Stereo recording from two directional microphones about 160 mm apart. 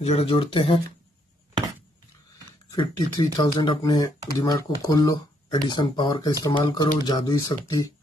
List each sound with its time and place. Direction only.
0.0 s speech: 40° left (ahead or behind)
2.7 s speech: 25° left (ahead or behind)